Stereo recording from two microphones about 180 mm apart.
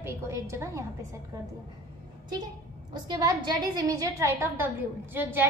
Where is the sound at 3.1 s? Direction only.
20° right (ahead or behind).